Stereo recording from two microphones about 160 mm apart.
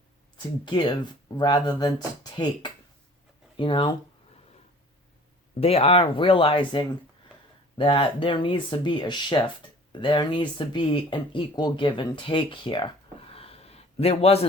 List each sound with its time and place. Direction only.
0.3 s speech: 30° left (ahead or behind)
5.5 s speech: 40° left (ahead or behind)
13.3 s a sound: 35° left (ahead or behind)